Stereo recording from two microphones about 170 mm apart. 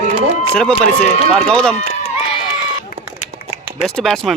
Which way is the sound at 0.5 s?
5° left (ahead or behind).